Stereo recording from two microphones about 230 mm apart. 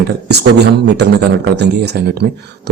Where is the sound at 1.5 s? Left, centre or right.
Right.